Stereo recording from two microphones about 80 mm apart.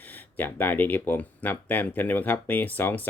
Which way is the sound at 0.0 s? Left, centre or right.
Left.